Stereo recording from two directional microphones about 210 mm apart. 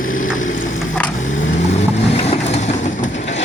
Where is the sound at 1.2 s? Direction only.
35° left (ahead or behind).